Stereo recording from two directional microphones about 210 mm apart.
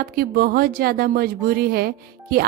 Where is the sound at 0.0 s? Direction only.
45° right (ahead or behind).